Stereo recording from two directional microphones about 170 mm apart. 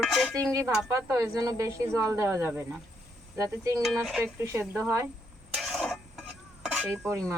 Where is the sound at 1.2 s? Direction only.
20° right (ahead or behind).